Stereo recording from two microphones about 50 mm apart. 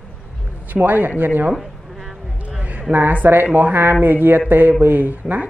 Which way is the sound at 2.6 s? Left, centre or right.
Right.